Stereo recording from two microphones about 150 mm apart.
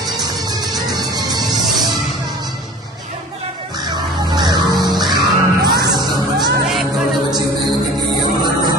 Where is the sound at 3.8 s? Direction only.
30° right (ahead or behind).